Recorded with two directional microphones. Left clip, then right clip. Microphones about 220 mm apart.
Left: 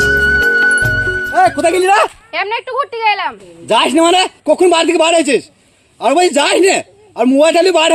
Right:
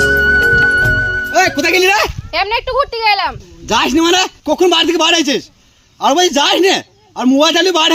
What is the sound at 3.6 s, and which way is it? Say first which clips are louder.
A man's voice: left 2 dB; 35° right (ahead or behind).